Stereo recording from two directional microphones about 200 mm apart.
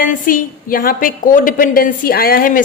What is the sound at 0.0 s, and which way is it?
A woman's voice, 45° left (ahead or behind).